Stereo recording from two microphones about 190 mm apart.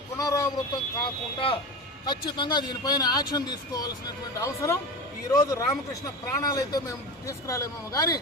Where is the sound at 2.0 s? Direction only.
25° left (ahead or behind).